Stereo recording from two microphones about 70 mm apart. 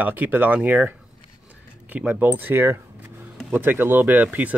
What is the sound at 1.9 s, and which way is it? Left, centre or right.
Speech, right.